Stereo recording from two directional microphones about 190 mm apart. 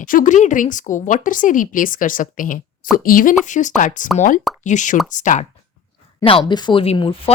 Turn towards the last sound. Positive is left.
turn(degrees=25)  # may be behind; listen again after turning